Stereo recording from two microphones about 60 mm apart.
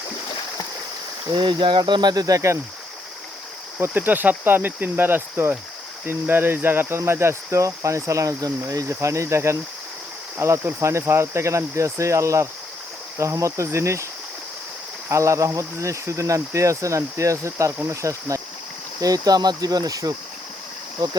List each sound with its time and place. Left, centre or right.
1.8 s speech: right
3.8 s speech: right
6.1 s cricket: right
8.7 s speech: right
10.3 s cricket: right
15.1 s speech: right
18.9 s speech: right